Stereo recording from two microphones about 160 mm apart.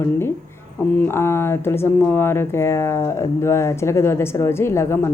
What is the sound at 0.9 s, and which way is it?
Speech, 15° left (ahead or behind).